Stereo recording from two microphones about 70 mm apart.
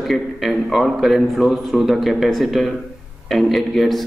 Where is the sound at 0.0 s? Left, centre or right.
Centre.